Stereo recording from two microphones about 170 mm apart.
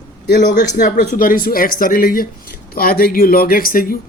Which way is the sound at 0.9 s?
55° left (ahead or behind).